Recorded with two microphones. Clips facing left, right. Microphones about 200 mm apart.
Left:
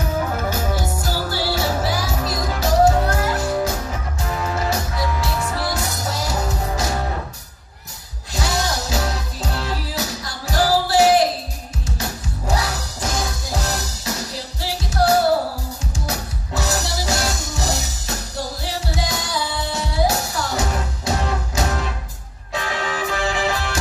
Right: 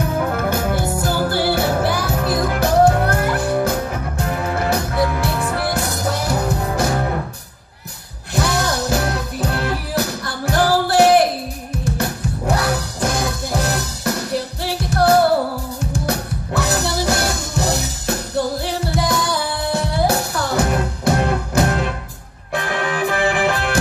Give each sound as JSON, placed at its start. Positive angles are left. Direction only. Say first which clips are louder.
{"t": 0.4, "sound": "music", "louder": "right 4 dB", "side_deg": -60}
{"t": 8.4, "sound": "music", "louder": "right 4 dB", "side_deg": -60}